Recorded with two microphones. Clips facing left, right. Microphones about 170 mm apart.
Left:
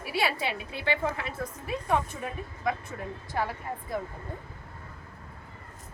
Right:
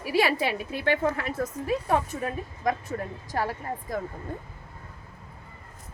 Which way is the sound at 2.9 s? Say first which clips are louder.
Right 6 dB; 50° right (ahead or behind).